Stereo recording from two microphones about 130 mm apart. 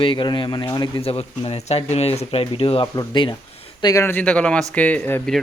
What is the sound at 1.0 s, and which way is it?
A man's voice, 50° left (ahead or behind).